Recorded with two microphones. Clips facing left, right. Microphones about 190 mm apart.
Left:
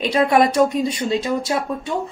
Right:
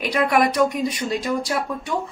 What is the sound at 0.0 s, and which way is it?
Speech, 25° left (ahead or behind).